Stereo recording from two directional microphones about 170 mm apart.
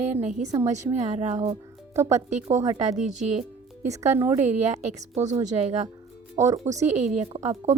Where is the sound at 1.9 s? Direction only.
15° right (ahead or behind).